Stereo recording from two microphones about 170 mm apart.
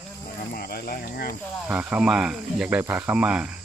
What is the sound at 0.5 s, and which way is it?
Cricket, 65° left (ahead or behind).